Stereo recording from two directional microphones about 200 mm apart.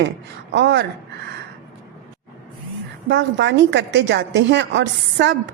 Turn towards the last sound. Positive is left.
turn(degrees=-65)  # may be behind; listen again after turning